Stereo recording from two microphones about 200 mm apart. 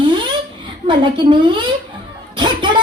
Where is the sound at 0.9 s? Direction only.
25° right (ahead or behind).